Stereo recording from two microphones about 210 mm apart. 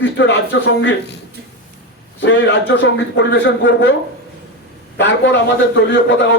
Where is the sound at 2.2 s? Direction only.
60° left (ahead or behind).